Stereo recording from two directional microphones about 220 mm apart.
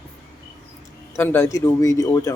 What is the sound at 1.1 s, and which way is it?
A man's voice, 10° left (ahead or behind).